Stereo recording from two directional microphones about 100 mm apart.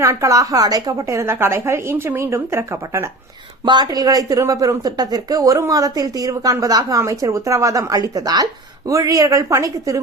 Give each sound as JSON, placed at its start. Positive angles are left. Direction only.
{"t": 0.0, "sound": "a woman's voice", "side_deg": -30}
{"t": 3.7, "sound": "speech", "side_deg": -45}